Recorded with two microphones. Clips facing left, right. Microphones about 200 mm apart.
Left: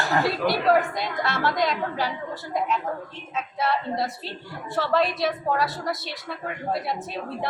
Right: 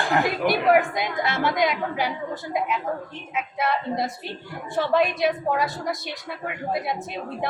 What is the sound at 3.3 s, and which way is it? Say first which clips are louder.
A woman's voice: even; 15° right (ahead or behind).